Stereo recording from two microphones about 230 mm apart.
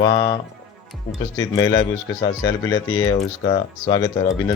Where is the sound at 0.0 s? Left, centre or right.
Centre.